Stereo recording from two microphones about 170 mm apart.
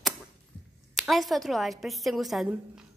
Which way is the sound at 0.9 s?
Centre (ahead or behind).